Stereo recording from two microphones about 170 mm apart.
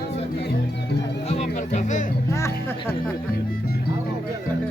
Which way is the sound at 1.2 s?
40° left (ahead or behind).